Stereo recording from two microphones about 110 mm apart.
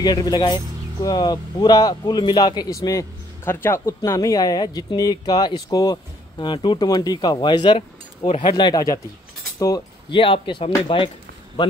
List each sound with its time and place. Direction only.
0.0 s speech: 35° left (ahead or behind)
6.4 s speech: 45° left (ahead or behind)
10.1 s speech: 50° left (ahead or behind)